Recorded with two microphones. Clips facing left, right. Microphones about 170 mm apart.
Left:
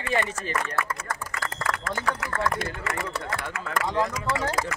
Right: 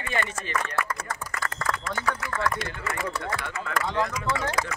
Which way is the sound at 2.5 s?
60° left (ahead or behind).